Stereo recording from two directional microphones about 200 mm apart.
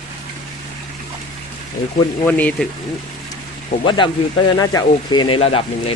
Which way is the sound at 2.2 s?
5° left (ahead or behind).